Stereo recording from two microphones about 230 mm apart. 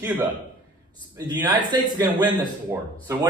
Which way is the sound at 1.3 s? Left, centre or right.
Centre.